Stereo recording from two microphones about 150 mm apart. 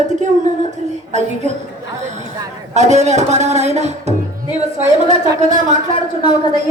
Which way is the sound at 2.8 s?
50° right (ahead or behind).